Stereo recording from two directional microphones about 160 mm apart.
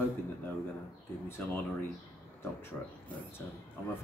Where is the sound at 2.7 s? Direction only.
5° left (ahead or behind).